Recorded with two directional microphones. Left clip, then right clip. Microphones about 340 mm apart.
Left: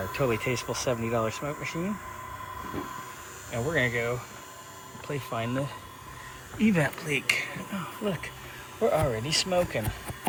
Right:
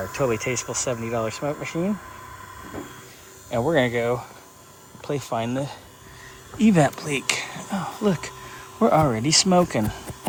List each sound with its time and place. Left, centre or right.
0.0 s speech: centre
3.5 s speech: centre
8.8 s speech: right
9.2 s speech: right